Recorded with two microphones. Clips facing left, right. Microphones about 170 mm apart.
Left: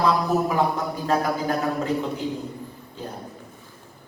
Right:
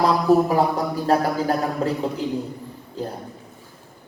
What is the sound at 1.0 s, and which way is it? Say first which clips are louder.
Speech: right 3 dB; 35° right (ahead or behind).